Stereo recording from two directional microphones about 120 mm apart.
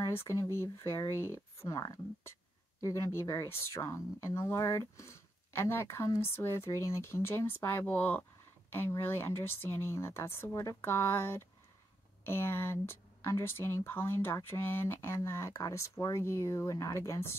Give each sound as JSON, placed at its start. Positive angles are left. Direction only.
{"t": 0.0, "sound": "speech", "side_deg": 20}